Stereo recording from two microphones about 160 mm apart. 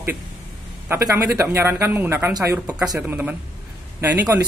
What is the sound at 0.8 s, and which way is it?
Speech, 15° right (ahead or behind).